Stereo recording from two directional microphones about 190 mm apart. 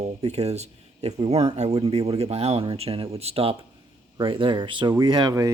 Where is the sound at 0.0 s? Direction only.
35° right (ahead or behind).